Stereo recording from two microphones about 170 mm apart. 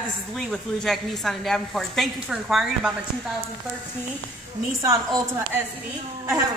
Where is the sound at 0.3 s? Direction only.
5° left (ahead or behind).